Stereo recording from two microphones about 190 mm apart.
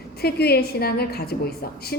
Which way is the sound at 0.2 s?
55° left (ahead or behind).